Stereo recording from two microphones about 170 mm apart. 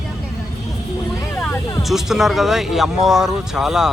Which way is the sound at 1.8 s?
Centre (ahead or behind).